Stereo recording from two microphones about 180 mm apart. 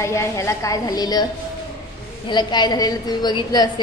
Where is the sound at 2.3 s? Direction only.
25° left (ahead or behind).